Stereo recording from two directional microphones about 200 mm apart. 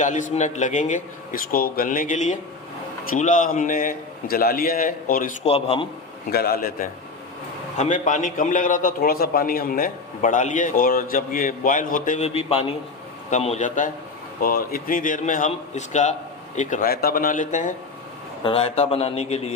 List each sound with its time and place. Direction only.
0.0 s a man's voice: 40° left (ahead or behind)
5.4 s a man's voice: 30° left (ahead or behind)
6.3 s a man's voice: 50° left (ahead or behind)
7.8 s a man's voice: 40° left (ahead or behind)
18.4 s a man's voice: 30° left (ahead or behind)